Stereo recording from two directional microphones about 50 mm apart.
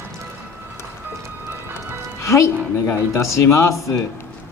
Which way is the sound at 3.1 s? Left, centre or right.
Left.